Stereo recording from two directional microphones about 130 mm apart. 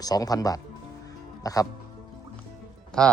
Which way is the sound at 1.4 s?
25° left (ahead or behind).